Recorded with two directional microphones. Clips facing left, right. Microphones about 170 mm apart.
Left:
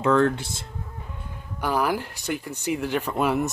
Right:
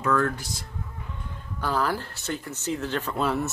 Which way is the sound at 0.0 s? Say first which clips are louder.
Left 5 dB; 25° left (ahead or behind).